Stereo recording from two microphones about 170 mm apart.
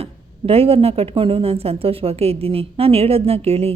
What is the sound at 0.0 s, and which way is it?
Speech, 35° right (ahead or behind).